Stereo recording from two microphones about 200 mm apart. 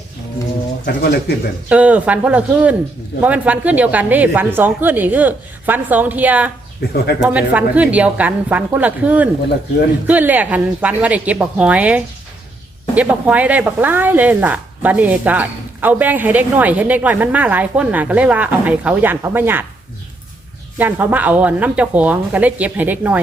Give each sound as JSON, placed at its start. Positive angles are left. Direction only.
{"t": 0.9, "sound": "speech", "side_deg": 50}
{"t": 1.7, "sound": "speech", "side_deg": -5}
{"t": 6.9, "sound": "speech", "side_deg": 55}
{"t": 7.2, "sound": "speech", "side_deg": -5}
{"t": 20.7, "sound": "speech", "side_deg": -10}